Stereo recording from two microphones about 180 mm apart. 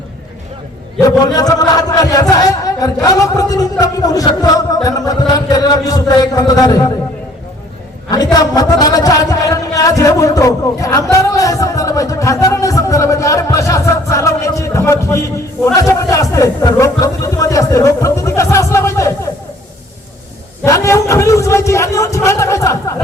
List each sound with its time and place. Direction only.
1.2 s speech: 20° left (ahead or behind)
8.1 s a man's voice: 20° left (ahead or behind)
20.7 s speech: 15° left (ahead or behind)